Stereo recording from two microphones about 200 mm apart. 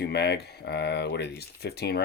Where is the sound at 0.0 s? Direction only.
55° left (ahead or behind).